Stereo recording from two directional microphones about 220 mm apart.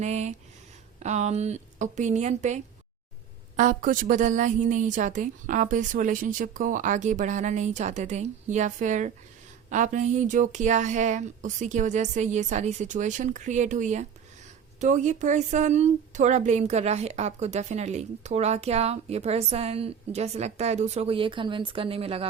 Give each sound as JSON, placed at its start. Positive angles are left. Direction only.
{"t": 0.0, "sound": "a woman's voice", "side_deg": -30}